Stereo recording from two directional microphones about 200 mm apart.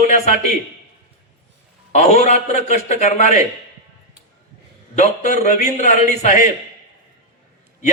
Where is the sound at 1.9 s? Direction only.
35° left (ahead or behind).